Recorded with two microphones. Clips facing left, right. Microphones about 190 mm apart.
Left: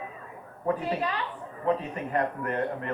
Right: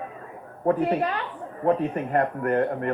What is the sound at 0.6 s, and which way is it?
A woman's voice, 55° right (ahead or behind).